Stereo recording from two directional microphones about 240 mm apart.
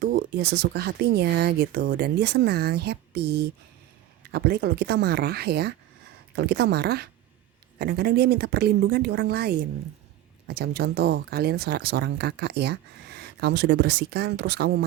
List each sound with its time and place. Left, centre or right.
0.0 s speech: right